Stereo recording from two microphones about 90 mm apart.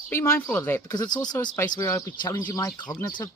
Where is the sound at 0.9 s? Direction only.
50° left (ahead or behind).